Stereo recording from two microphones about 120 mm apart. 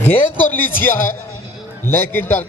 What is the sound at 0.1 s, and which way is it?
A man's voice, 15° left (ahead or behind).